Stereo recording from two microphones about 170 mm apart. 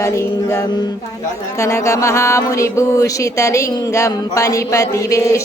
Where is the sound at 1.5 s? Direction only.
15° left (ahead or behind).